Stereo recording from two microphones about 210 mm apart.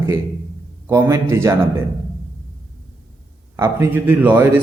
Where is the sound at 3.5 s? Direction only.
10° right (ahead or behind).